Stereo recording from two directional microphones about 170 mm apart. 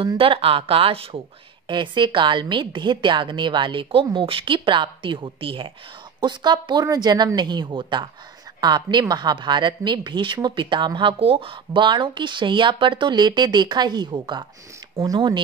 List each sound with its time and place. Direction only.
0.0 s a woman's voice: 30° right (ahead or behind)